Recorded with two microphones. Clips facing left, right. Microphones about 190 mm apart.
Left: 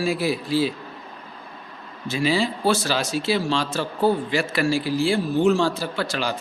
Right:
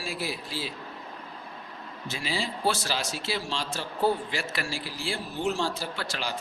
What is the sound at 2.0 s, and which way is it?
Speech, 75° left (ahead or behind).